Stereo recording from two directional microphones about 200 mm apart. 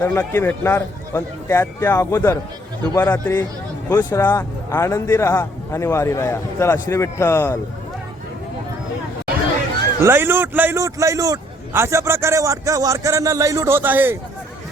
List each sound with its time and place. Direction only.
0.0 s speech: 10° left (ahead or behind)
10.0 s a man's voice: 10° right (ahead or behind)